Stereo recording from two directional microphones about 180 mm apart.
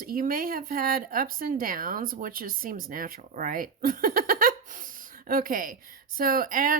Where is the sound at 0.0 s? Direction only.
50° right (ahead or behind).